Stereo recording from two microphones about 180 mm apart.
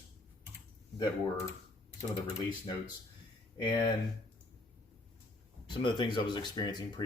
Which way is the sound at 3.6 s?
20° left (ahead or behind).